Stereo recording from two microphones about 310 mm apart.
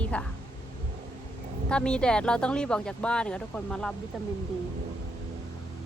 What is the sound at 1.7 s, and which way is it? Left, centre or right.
Speech, centre.